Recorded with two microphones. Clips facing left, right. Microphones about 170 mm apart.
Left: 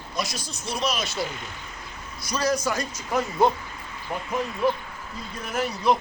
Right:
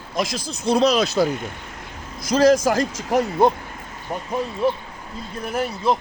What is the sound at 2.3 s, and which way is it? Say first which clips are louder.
Speech: right 10 dB; 90° right.